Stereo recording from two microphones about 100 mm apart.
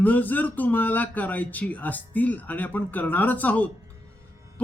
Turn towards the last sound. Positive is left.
turn(degrees=15)  # may be behind; listen again after turning